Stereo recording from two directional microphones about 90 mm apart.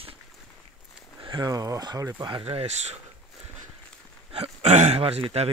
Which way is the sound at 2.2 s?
80° right.